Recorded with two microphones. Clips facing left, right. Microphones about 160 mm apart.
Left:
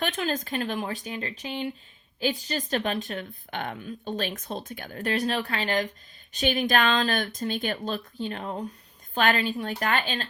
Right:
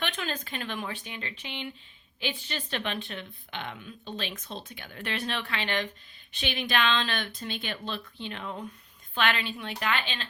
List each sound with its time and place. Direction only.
0.0 s speech: 40° left (ahead or behind)